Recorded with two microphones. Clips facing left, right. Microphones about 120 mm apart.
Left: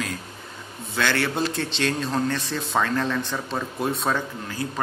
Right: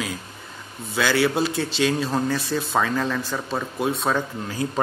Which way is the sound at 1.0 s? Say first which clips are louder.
Right 3 dB; 5° right (ahead or behind).